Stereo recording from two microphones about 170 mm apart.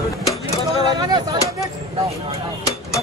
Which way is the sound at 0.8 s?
25° right (ahead or behind).